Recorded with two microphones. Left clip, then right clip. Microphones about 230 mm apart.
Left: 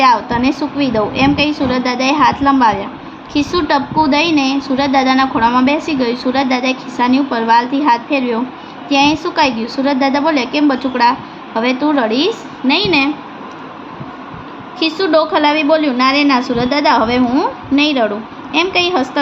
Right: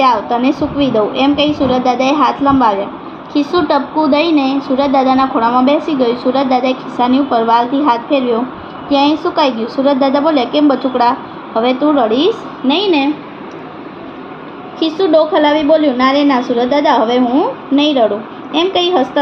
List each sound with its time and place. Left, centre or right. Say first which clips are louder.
0.0 s a woman's voice: even; left
14.8 s a woman's voice: right 2 dB; left